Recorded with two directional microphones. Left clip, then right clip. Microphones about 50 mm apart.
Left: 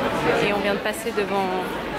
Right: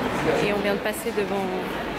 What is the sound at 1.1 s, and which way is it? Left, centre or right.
Speech, centre.